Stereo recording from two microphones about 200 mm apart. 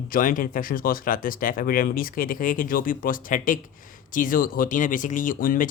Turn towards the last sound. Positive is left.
turn(degrees=45)  # may be behind; listen again after turning